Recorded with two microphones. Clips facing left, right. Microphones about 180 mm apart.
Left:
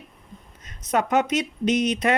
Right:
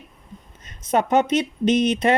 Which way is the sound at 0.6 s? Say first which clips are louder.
Right 3 dB; 30° right (ahead or behind).